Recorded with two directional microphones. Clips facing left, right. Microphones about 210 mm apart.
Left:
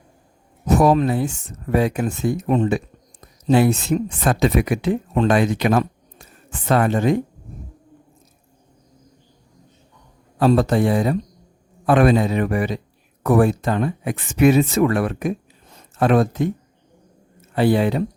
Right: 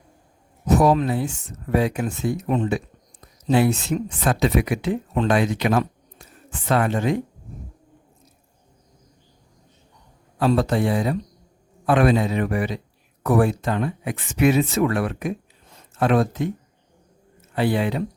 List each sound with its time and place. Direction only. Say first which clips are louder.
0.7 s speech: left 2 dB; 50° left (ahead or behind)
10.4 s speech: left 3 dB; 45° left (ahead or behind)
17.5 s speech: left 4 dB; 40° left (ahead or behind)